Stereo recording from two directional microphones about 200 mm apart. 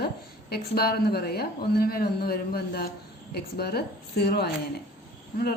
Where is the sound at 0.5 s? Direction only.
50° left (ahead or behind).